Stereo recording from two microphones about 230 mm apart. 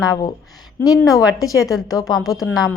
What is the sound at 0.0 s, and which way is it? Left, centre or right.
Speech, centre.